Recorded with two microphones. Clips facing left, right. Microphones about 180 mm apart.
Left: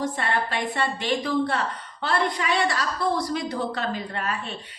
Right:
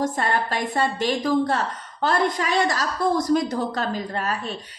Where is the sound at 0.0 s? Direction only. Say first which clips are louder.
Right 3 dB; 40° right (ahead or behind).